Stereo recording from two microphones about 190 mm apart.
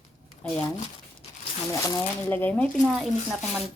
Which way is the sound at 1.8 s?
20° left (ahead or behind).